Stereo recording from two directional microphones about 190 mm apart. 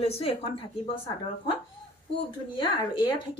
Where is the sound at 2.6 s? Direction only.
25° left (ahead or behind).